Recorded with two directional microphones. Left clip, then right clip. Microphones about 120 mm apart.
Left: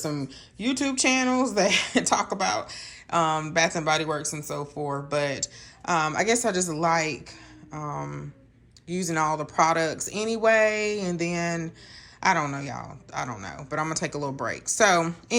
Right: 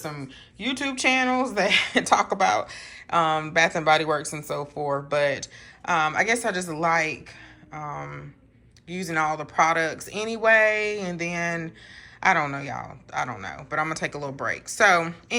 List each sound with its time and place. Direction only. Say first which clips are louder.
0.0 s speech: left 3 dB; 35° left (ahead or behind)